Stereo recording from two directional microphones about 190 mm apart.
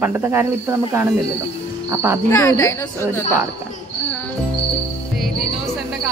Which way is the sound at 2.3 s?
15° left (ahead or behind).